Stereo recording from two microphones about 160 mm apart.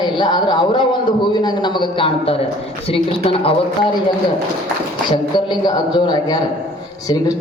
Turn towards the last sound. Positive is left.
turn(degrees=25)  # may be behind; listen again after turning